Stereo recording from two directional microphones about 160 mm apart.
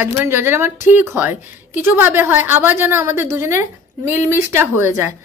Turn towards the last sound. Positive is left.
turn(degrees=-15)  # may be behind; listen again after turning